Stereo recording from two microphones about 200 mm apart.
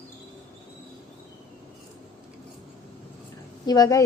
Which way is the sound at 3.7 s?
20° left (ahead or behind).